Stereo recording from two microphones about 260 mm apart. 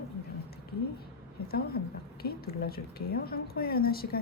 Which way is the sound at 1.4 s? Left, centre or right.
Left.